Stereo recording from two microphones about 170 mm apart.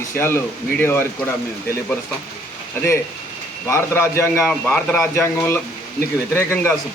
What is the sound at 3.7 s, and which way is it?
Speech, 15° left (ahead or behind).